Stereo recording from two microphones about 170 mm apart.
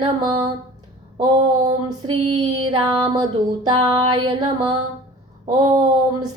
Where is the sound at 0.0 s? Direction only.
25° right (ahead or behind).